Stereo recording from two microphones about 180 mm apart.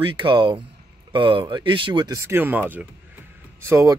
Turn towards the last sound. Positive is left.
turn(degrees=-15)  # may be behind; listen again after turning